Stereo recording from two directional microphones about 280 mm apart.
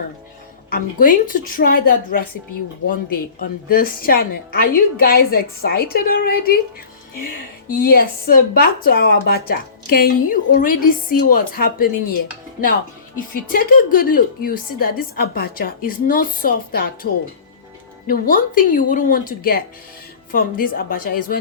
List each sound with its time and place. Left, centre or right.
0.7 s speech: left
3.7 s a woman's voice: left
7.7 s a woman's voice: left
13.1 s a woman's voice: left